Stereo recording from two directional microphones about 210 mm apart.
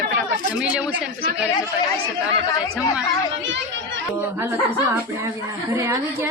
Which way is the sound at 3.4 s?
60° right (ahead or behind).